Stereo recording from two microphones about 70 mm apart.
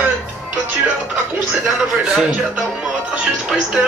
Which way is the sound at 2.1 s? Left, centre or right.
Centre.